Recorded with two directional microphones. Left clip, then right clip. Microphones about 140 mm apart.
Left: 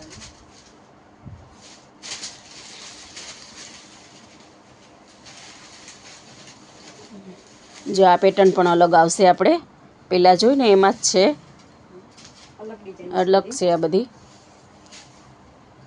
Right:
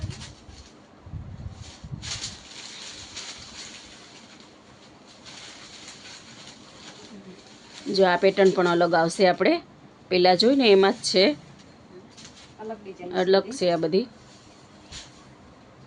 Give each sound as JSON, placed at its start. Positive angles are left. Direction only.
{"t": 7.9, "sound": "a woman's voice", "side_deg": 20}
{"t": 13.1, "sound": "a woman's voice", "side_deg": 15}